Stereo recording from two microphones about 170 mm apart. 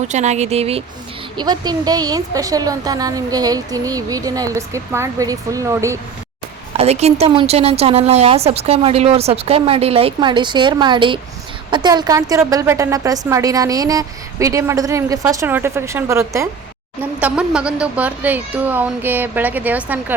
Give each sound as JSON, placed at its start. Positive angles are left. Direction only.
{"t": 0.1, "sound": "a woman's voice", "side_deg": -40}
{"t": 1.4, "sound": "a woman's voice", "side_deg": -25}
{"t": 6.7, "sound": "a woman's voice", "side_deg": -40}